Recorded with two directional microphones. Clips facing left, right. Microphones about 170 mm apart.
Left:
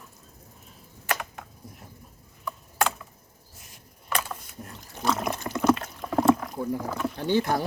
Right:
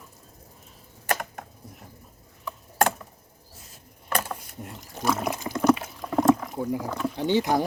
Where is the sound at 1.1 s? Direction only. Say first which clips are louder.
Right 2 dB; 45° right (ahead or behind).